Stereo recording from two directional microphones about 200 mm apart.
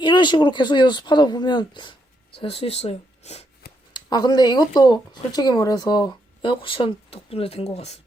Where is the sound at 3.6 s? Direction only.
50° left (ahead or behind).